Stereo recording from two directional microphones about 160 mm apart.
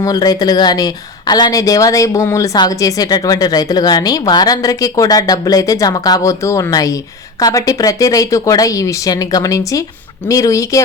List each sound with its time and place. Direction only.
0.0 s a woman's voice: 25° left (ahead or behind)